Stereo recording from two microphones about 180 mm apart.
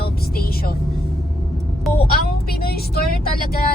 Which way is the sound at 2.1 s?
60° left (ahead or behind).